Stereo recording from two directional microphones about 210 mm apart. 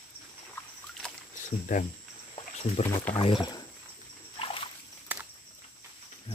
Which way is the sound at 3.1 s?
25° left (ahead or behind).